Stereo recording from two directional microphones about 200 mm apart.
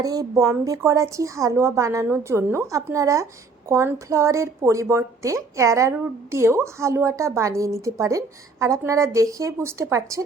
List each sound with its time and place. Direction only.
0.0 s a woman's voice: 15° right (ahead or behind)